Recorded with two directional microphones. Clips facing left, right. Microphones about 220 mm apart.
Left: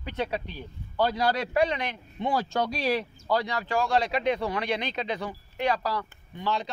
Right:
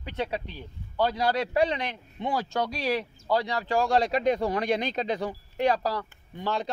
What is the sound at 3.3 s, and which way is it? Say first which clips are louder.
Speech: right 1 dB; 30° right (ahead or behind).